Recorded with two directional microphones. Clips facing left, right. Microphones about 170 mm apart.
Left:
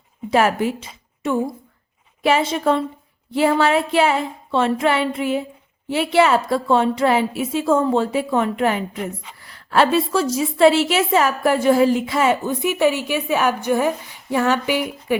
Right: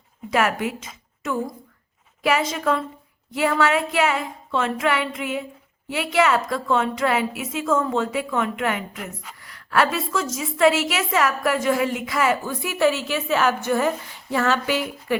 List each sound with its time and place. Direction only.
0.3 s a woman's voice: 30° left (ahead or behind); by 15.2 s 15° left (ahead or behind)